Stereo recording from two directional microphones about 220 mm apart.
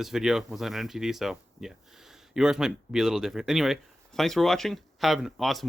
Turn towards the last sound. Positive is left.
turn(degrees=0)  # may be behind; listen again after turning